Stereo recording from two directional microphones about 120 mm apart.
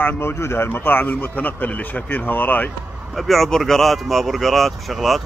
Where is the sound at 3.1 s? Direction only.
Centre (ahead or behind).